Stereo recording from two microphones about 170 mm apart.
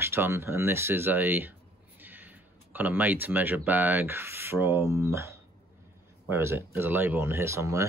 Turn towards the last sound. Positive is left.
turn(degrees=-15)  # may be behind; listen again after turning